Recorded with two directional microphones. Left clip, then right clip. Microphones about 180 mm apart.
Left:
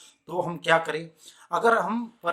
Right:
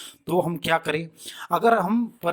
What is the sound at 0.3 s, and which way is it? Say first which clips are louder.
Speech: right 1 dB; 45° right (ahead or behind).